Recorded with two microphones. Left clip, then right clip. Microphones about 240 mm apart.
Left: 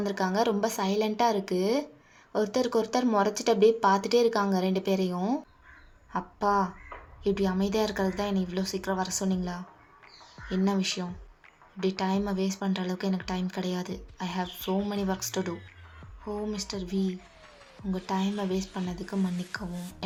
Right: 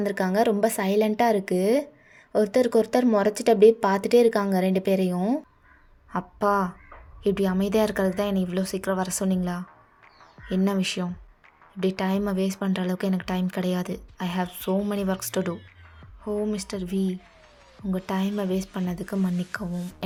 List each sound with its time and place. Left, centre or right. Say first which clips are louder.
0.0 s speech: right 4 dB; right